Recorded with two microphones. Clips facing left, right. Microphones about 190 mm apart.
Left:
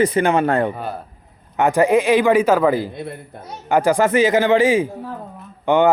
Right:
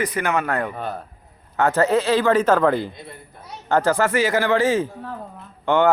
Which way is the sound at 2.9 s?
60° left (ahead or behind).